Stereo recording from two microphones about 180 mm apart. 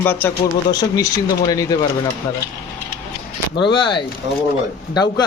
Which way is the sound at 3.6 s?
25° left (ahead or behind).